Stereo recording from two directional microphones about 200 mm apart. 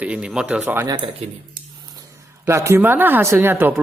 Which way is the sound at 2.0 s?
15° right (ahead or behind).